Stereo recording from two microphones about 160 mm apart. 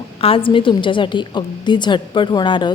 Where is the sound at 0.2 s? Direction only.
35° left (ahead or behind).